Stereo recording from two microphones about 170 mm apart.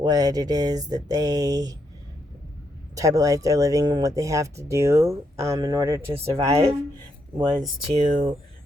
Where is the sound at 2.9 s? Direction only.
20° right (ahead or behind).